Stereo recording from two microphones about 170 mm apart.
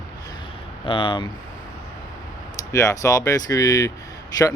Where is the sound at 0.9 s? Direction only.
30° left (ahead or behind).